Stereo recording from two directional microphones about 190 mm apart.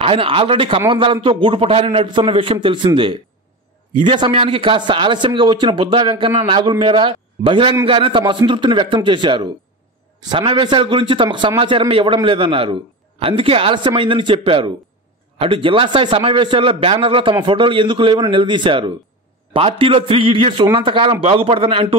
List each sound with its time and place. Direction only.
0.0 s a man's voice: 30° right (ahead or behind)